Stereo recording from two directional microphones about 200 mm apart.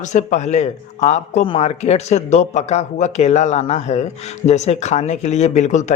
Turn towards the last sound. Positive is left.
turn(degrees=35)  # may be behind; listen again after turning